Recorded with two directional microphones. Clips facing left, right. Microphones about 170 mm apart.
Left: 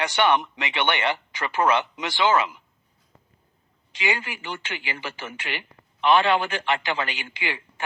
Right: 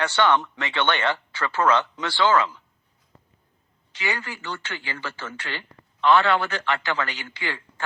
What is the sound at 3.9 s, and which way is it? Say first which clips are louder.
Speech: left 2 dB; 15° left (ahead or behind).